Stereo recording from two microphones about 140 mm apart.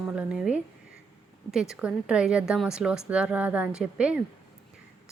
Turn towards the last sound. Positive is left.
turn(degrees=-5)  # may be behind; listen again after turning